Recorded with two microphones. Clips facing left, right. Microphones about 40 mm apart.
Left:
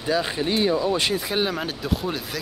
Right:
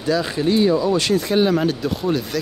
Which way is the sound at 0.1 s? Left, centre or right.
Centre.